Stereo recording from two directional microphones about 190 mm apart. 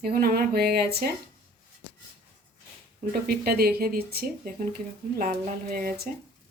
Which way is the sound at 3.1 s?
55° right (ahead or behind).